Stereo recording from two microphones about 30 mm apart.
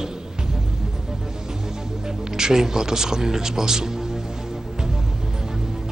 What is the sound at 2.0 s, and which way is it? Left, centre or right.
Speech, centre.